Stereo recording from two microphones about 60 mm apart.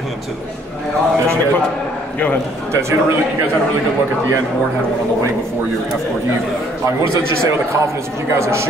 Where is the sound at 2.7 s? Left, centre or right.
Right.